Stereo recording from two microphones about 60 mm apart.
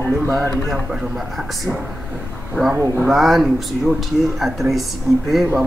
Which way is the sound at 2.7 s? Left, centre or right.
Right.